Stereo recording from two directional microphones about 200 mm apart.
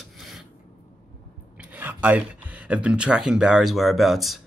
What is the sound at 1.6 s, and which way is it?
Speech, 5° right (ahead or behind).